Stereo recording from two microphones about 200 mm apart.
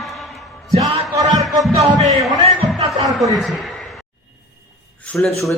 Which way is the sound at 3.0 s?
Centre (ahead or behind).